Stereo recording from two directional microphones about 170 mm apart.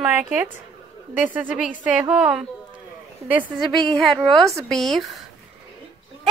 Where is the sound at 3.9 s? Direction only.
Centre (ahead or behind).